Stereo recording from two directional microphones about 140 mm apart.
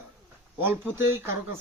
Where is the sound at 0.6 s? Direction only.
15° right (ahead or behind).